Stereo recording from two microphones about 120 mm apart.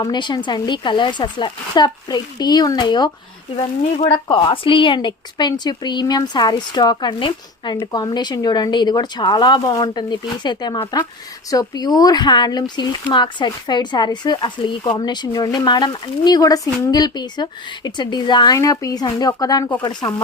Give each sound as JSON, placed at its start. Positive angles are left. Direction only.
{"t": 0.0, "sound": "speech", "side_deg": 40}